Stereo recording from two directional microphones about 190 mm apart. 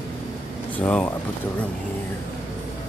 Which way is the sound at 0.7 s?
10° left (ahead or behind).